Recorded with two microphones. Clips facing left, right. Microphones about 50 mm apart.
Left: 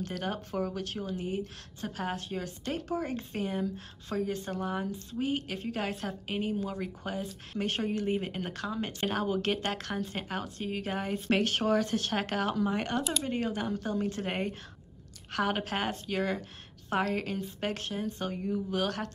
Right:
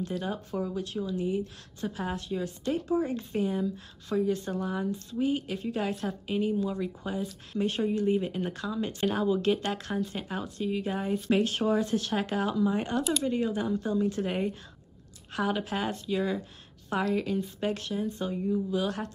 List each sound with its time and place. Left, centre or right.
0.0 s speech: left
1.0 s speech: left
13.0 s speech: centre
13.4 s speech: left
18.7 s speech: left